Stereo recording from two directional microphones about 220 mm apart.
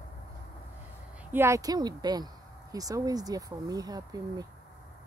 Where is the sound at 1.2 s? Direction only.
10° right (ahead or behind).